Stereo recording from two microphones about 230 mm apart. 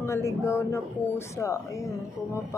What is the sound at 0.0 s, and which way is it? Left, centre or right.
A woman's voice, centre.